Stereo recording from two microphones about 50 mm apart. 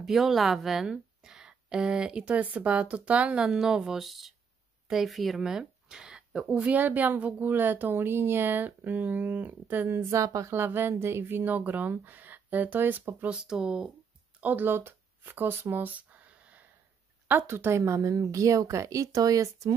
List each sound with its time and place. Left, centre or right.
0.0 s speech: centre
0.8 s a sound: centre
2.2 s a woman's voice: right
3.4 s speech: centre
5.4 s a sound: centre
6.5 s a woman's voice: right
9.8 s a woman's voice: right
10.5 s a woman's voice: right
13.3 s speech: centre
14.4 s speech: right
15.8 s a sound: right
17.3 s speech: right